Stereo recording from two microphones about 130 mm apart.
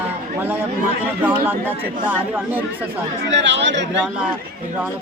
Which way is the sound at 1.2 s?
10° right (ahead or behind).